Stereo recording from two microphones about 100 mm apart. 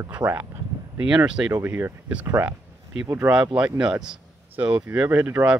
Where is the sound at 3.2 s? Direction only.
20° right (ahead or behind).